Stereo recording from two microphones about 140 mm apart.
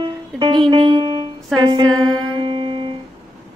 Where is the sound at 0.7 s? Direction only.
35° right (ahead or behind).